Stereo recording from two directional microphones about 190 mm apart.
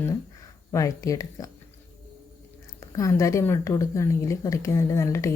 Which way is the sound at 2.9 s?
15° left (ahead or behind).